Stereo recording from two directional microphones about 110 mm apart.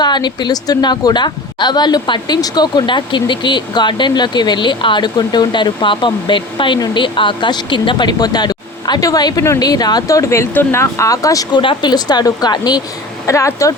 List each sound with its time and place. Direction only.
0.0 s a woman's voice: 40° left (ahead or behind)
11.6 s a woman's voice: 45° left (ahead or behind)
13.2 s speech: 30° left (ahead or behind)